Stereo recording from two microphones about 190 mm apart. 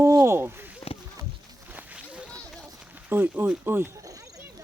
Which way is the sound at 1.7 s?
5° right (ahead or behind).